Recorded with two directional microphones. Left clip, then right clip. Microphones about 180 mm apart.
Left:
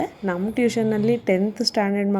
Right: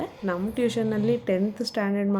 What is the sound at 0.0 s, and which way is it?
A woman's voice, 20° left (ahead or behind).